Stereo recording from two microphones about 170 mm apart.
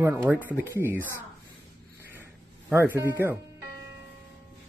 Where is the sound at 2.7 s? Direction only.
15° right (ahead or behind).